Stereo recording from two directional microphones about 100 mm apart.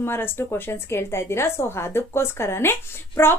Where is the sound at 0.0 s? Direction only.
25° left (ahead or behind).